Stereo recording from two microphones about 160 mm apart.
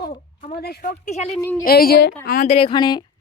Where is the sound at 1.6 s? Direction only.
70° left (ahead or behind).